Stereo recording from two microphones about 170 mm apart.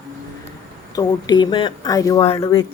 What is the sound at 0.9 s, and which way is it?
Speech, 25° left (ahead or behind).